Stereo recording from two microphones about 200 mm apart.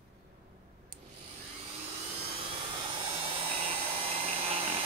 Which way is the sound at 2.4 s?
25° right (ahead or behind).